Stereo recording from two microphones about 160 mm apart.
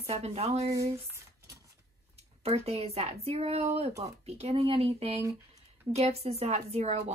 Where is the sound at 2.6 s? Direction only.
40° right (ahead or behind).